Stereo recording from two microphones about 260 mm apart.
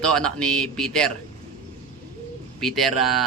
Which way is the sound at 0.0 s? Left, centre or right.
Centre.